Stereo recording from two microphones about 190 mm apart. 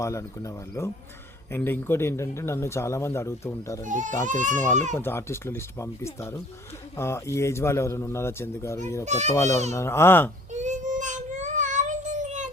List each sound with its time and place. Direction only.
0.0 s speech: 15° left (ahead or behind)
3.8 s speech: 40° right (ahead or behind)
4.9 s speech: 10° left (ahead or behind)
9.0 s speech: 35° right (ahead or behind)
9.3 s speech: 15° left (ahead or behind)
10.5 s child singing: 40° right (ahead or behind)